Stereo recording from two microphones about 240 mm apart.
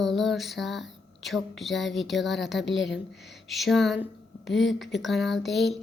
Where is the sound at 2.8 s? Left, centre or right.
Left.